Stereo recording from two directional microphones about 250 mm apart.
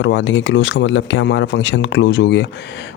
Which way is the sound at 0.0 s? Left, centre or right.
Left.